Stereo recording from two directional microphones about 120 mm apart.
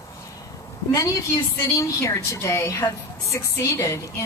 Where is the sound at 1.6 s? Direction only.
25° left (ahead or behind).